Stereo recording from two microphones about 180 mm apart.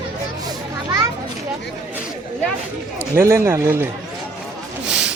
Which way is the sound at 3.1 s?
15° right (ahead or behind).